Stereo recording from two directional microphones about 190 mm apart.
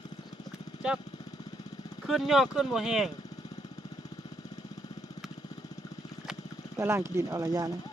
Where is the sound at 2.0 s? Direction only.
Centre (ahead or behind).